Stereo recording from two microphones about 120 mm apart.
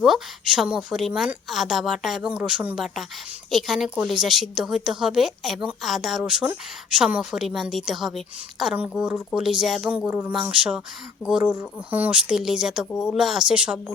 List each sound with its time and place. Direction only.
0.0 s a woman's voice: 5° right (ahead or behind)